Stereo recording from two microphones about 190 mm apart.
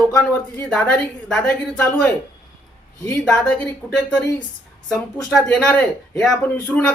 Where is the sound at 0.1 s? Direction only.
5° left (ahead or behind).